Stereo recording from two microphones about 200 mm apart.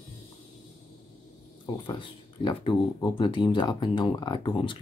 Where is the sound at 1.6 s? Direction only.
25° left (ahead or behind).